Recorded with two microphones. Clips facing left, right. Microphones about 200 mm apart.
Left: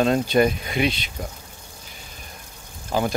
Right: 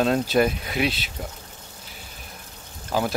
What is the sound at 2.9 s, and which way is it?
Speech, centre (ahead or behind).